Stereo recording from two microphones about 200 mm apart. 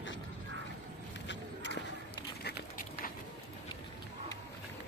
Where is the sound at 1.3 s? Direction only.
60° left (ahead or behind).